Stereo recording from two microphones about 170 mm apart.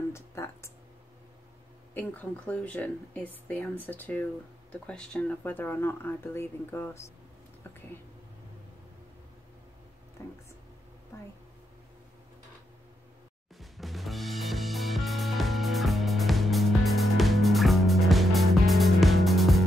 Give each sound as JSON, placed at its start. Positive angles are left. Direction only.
{"t": 0.1, "sound": "a sound", "side_deg": 15}
{"t": 2.0, "sound": "speech", "side_deg": 10}
{"t": 10.2, "sound": "whispering", "side_deg": 15}
{"t": 13.6, "sound": "music", "side_deg": 0}